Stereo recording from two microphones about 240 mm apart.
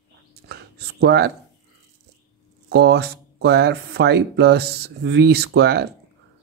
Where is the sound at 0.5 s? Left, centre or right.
Right.